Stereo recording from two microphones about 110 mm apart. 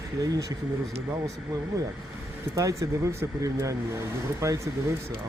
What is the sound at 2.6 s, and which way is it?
Speech, 30° right (ahead or behind).